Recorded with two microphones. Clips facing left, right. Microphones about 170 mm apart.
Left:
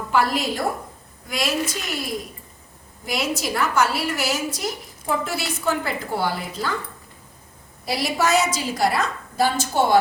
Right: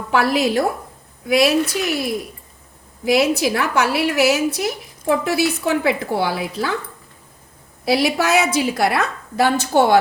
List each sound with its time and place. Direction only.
0.1 s a woman's voice: 75° right (ahead or behind)
3.0 s a woman's voice: 70° right (ahead or behind)
7.9 s a woman's voice: 70° right (ahead or behind)